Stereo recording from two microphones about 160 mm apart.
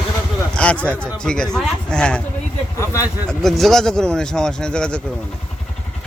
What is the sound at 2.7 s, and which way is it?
Speech, 20° left (ahead or behind).